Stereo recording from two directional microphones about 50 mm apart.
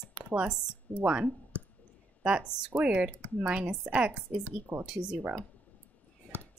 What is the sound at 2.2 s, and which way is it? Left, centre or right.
Speech, centre.